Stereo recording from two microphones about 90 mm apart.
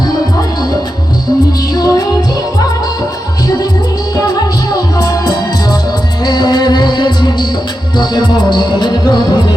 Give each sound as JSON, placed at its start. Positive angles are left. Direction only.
{"t": 1.7, "sound": "music", "side_deg": 45}
{"t": 4.1, "sound": "music", "side_deg": 50}